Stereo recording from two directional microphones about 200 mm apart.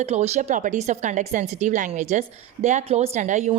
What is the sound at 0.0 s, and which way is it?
Speech, 35° right (ahead or behind).